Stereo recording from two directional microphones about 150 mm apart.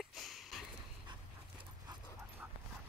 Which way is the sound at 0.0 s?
Centre (ahead or behind).